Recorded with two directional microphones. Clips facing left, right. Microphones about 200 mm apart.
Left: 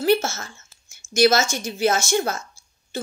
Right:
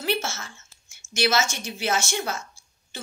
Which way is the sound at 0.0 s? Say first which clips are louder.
Left 8 dB; 40° left (ahead or behind).